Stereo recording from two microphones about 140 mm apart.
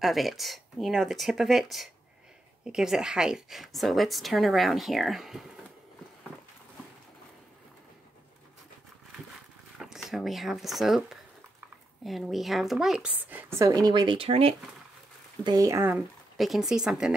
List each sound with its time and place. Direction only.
0.0 s a woman's voice: centre (ahead or behind)
9.8 s a woman's voice: 5° right (ahead or behind); by 14.5 s 40° right (ahead or behind)
15.4 s speech: 25° right (ahead or behind)
16.3 s a woman's voice: centre (ahead or behind)